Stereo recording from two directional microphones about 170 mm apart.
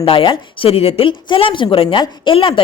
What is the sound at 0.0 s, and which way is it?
A woman's voice, 30° left (ahead or behind).